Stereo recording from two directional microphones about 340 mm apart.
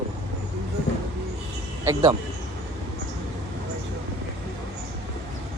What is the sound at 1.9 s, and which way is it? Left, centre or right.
Speech, centre.